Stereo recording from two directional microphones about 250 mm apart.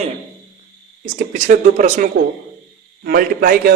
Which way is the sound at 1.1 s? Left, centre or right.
Right.